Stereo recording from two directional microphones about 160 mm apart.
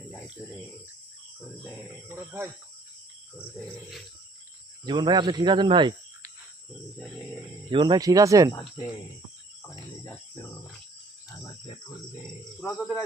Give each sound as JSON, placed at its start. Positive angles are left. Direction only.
{"t": 0.3, "sound": "speech", "side_deg": 0}
{"t": 2.0, "sound": "speech", "side_deg": -15}
{"t": 4.9, "sound": "speech", "side_deg": -25}
{"t": 7.7, "sound": "speech", "side_deg": -30}
{"t": 12.5, "sound": "a man's voice", "side_deg": 5}